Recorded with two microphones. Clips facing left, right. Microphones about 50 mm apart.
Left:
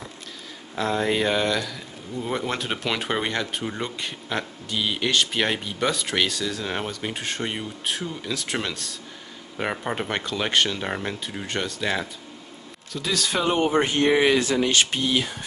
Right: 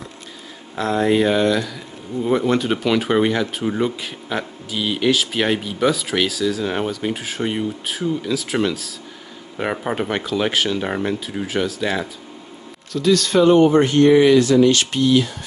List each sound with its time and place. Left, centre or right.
0.7 s speech: centre; by 15.2 s left